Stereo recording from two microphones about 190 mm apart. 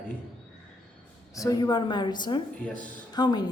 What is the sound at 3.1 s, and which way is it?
Speech, 20° left (ahead or behind).